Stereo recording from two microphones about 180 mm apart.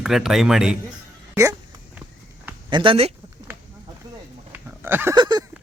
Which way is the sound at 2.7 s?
30° right (ahead or behind).